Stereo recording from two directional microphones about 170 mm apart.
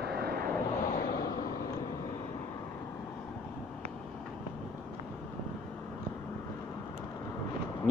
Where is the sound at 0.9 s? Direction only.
60° left (ahead or behind).